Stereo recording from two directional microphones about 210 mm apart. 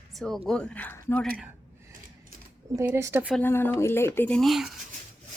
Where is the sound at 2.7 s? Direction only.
10° right (ahead or behind).